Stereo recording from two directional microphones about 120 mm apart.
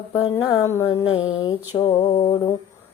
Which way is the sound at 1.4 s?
35° left (ahead or behind).